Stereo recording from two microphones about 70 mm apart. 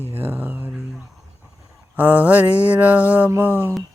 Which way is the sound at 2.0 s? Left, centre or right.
Right.